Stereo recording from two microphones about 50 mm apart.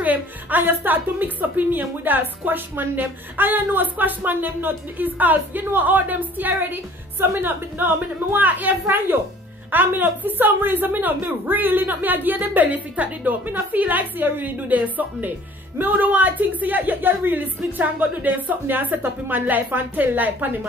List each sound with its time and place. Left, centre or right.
0.0 s a woman's voice: right
8.8 s a woman's voice: right